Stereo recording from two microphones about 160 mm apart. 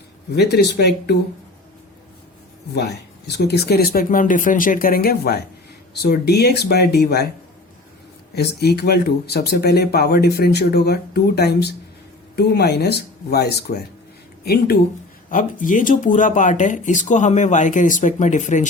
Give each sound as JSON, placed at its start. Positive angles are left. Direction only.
{"t": 0.3, "sound": "speech", "side_deg": 90}
{"t": 2.7, "sound": "speech", "side_deg": 90}
{"t": 5.9, "sound": "speech", "side_deg": 90}
{"t": 8.4, "sound": "speech", "side_deg": 85}
{"t": 15.3, "sound": "speech", "side_deg": 55}